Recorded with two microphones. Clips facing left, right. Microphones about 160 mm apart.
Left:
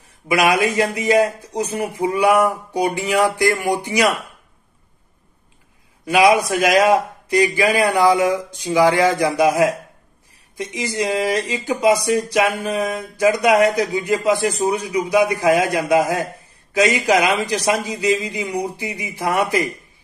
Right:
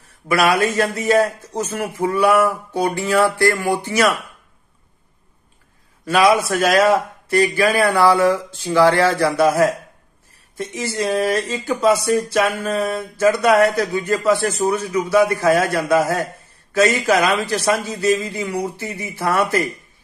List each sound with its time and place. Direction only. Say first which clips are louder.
0.3 s a man's voice: even; 15° left (ahead or behind)
6.0 s a man's voice: left 1 dB; 15° left (ahead or behind)